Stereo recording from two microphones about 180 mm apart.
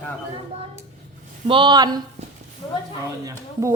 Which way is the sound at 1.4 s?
25° right (ahead or behind).